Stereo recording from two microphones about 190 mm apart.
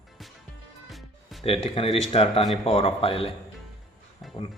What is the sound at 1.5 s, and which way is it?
Speech, 30° left (ahead or behind).